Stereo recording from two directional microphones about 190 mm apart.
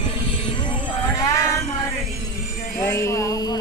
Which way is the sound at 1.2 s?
15° left (ahead or behind).